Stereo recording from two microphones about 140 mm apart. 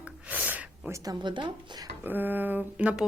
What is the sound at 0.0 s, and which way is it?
Gasp, 10° right (ahead or behind).